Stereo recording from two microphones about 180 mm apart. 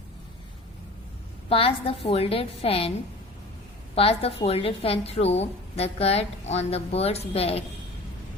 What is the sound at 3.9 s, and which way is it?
A woman's voice, 35° left (ahead or behind).